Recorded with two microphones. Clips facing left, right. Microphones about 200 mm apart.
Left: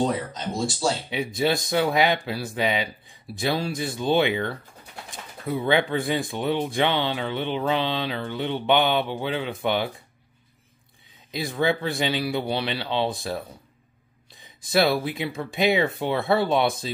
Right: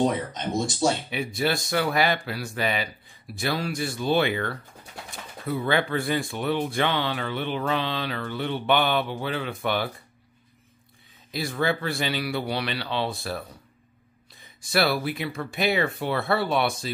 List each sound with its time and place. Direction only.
0.3 s speech: 20° right (ahead or behind)
1.1 s speech: 20° left (ahead or behind)
11.3 s speech: 20° left (ahead or behind)
14.4 s speech: 20° left (ahead or behind)